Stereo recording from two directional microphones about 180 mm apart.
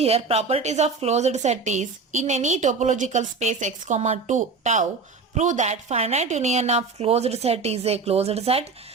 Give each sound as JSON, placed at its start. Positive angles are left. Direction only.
{"t": 0.0, "sound": "a woman's voice", "side_deg": -35}